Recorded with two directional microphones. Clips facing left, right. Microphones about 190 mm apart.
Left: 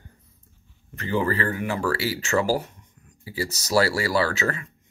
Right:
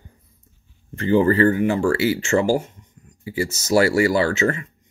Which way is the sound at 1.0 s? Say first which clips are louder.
Right 9 dB; 30° right (ahead or behind).